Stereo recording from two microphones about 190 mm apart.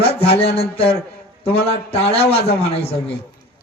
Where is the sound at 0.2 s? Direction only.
30° left (ahead or behind).